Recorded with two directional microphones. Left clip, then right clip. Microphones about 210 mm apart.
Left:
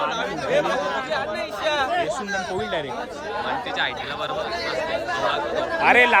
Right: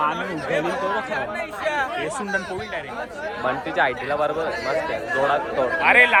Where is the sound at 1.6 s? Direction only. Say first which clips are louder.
Left 1 dB; 45° left (ahead or behind).